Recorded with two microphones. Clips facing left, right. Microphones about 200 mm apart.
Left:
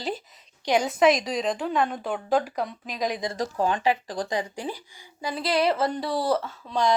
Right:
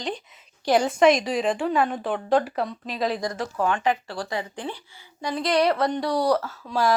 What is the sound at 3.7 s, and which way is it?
A woman's voice, 15° left (ahead or behind).